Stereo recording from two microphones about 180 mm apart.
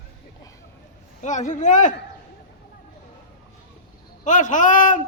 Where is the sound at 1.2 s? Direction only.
45° left (ahead or behind).